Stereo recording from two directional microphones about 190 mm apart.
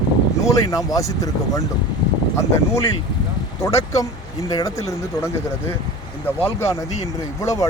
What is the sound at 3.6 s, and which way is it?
Speech, 15° left (ahead or behind).